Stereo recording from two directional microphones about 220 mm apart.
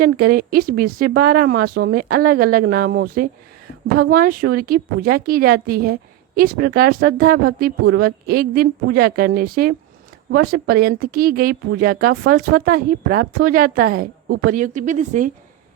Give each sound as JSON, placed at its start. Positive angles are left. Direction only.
{"t": 0.0, "sound": "a woman's voice", "side_deg": -40}